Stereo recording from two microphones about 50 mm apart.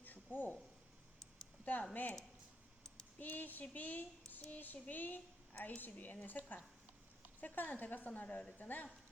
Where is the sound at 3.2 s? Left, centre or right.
Left.